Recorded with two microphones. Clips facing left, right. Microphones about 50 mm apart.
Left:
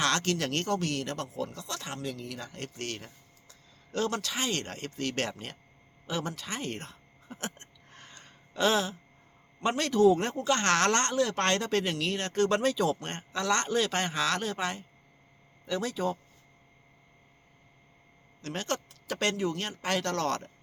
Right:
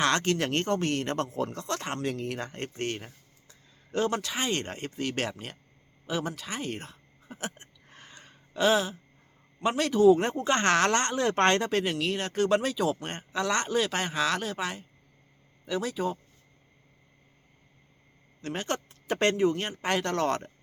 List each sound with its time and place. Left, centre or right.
0.0 s speech: right
2.6 s speech: right; by 5.5 s centre
6.1 s a sound: centre
9.6 s speech: centre
10.3 s speech: right
10.6 s speech: centre
11.1 s speech: right; by 16.1 s centre
18.4 s speech: centre
18.9 s speech: right